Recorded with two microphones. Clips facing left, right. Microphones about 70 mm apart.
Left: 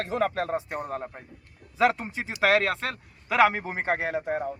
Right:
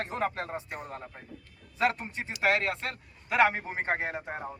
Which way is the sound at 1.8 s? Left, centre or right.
Left.